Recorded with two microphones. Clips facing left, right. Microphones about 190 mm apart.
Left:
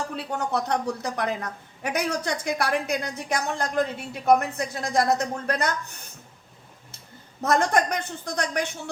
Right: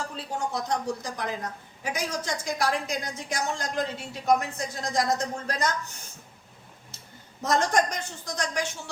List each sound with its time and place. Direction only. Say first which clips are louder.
0.2 s a woman's voice: left 3 dB; 65° left (ahead or behind)
7.4 s a woman's voice: left 2 dB; 60° left (ahead or behind)